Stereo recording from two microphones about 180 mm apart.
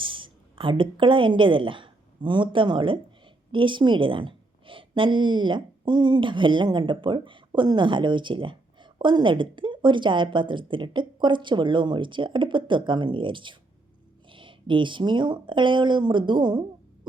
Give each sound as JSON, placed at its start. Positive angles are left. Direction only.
{"t": 0.0, "sound": "a woman's voice", "side_deg": -30}